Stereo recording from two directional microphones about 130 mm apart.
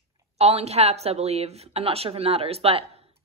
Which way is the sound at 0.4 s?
50° right (ahead or behind).